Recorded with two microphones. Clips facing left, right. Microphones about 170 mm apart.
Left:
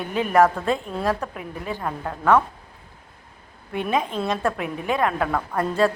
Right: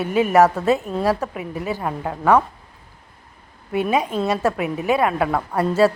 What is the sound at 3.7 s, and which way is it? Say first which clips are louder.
A woman's voice: right 4 dB; 5° right (ahead or behind).